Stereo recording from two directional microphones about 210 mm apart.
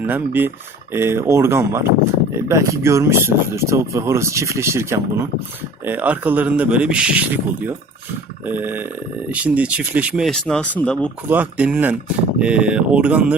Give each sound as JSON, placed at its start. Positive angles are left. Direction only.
{"t": 0.0, "sound": "speech", "side_deg": -10}
{"t": 11.3, "sound": "speech", "side_deg": -5}